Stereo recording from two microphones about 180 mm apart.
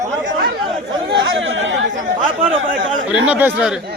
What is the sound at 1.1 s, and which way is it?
Chatter, 85° right.